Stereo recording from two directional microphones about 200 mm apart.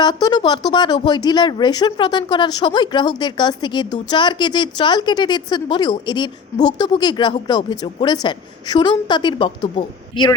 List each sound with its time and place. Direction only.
0.0 s speech: 20° left (ahead or behind)